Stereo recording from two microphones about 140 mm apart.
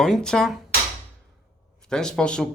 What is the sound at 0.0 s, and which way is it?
Speech, 5° left (ahead or behind).